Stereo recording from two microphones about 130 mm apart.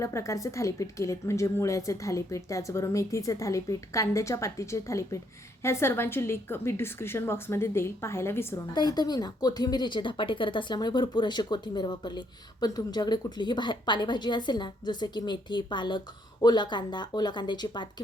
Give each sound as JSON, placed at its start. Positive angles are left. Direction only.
{"t": 0.0, "sound": "a woman's voice", "side_deg": 25}
{"t": 8.7, "sound": "speech", "side_deg": 35}